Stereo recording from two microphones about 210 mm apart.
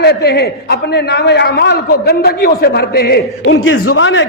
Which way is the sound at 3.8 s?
65° left (ahead or behind).